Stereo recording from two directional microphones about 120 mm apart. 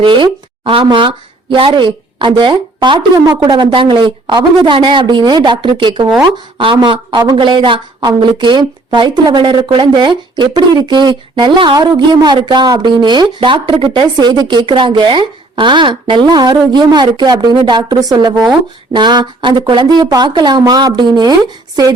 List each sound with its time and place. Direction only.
0.0 s speech: 45° right (ahead or behind)